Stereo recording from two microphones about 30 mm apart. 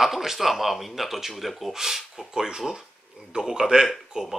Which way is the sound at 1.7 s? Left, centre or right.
Centre.